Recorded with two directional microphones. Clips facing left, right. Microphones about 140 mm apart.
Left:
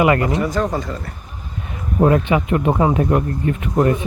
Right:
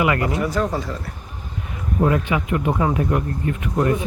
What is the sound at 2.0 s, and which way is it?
Speech, 35° left (ahead or behind).